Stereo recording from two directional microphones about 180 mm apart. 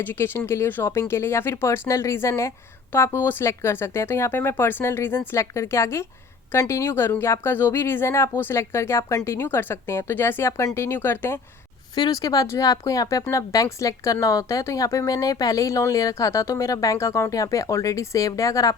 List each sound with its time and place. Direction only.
0.0 s speech: 10° left (ahead or behind)